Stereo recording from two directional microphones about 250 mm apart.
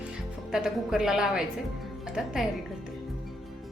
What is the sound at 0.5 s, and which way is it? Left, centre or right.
Speech, centre.